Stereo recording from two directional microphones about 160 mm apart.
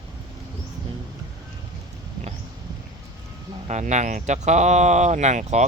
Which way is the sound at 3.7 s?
45° right (ahead or behind).